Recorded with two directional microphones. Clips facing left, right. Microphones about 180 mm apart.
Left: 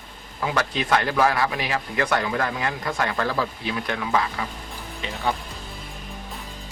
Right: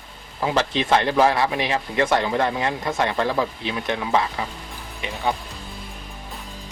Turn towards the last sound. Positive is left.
turn(degrees=-15)  # may be behind; listen again after turning